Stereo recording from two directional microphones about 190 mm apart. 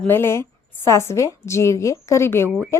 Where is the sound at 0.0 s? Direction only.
10° left (ahead or behind).